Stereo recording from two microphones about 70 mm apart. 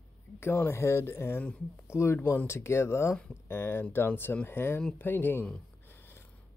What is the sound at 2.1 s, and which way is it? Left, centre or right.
Speech, left.